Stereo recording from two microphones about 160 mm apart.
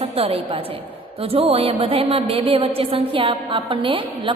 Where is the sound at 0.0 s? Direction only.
40° right (ahead or behind).